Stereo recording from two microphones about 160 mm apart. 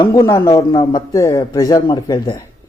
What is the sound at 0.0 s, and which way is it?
Speech, 20° left (ahead or behind).